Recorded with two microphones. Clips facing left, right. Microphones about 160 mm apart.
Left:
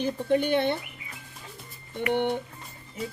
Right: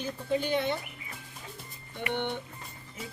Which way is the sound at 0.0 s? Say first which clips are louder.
Left 6 dB; 65° left (ahead or behind).